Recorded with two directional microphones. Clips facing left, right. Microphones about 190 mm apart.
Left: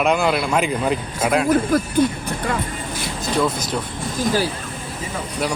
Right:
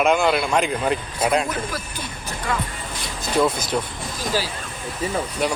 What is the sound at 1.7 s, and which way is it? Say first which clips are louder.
Speech: left 13 dB; 55° left (ahead or behind).